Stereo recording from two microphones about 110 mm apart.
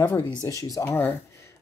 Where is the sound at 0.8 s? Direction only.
15° left (ahead or behind).